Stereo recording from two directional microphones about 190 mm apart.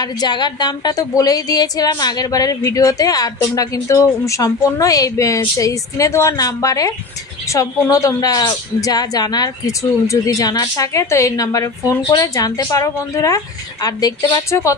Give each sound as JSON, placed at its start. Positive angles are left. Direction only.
{"t": 0.0, "sound": "a woman's voice", "side_deg": 20}